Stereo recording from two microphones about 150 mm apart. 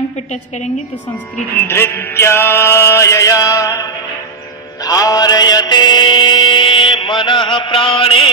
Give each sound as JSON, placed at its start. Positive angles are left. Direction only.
{"t": 1.7, "sound": "music", "side_deg": 15}
{"t": 4.8, "sound": "mantra", "side_deg": 25}